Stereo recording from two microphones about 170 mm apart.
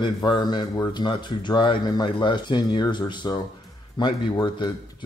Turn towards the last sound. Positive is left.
turn(degrees=25)  # may be behind; listen again after turning